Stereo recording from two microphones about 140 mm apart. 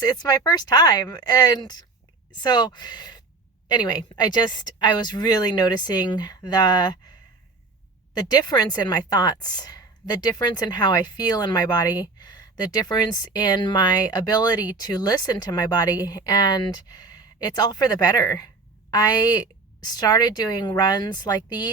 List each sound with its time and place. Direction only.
0.0 s a woman's voice: 30° left (ahead or behind)
8.2 s a woman's voice: 25° left (ahead or behind)